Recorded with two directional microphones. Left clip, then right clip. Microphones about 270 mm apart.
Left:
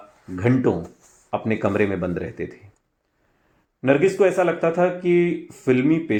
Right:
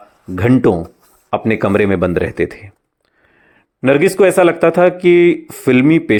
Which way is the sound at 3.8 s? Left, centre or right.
Right.